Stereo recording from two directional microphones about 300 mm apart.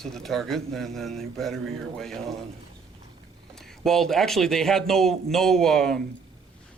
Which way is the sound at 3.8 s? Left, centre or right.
Centre.